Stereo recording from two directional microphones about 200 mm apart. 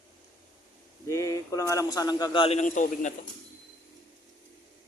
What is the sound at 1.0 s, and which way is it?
Speech, 15° left (ahead or behind).